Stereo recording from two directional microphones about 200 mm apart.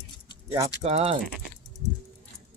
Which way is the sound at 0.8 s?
30° right (ahead or behind).